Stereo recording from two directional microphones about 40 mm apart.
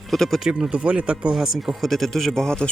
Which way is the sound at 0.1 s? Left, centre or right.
Centre.